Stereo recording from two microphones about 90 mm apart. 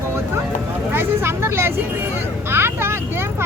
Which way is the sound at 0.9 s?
25° right (ahead or behind).